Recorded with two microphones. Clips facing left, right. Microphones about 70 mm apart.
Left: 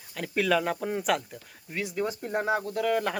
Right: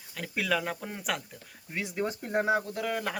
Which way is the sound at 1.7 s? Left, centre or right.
Centre.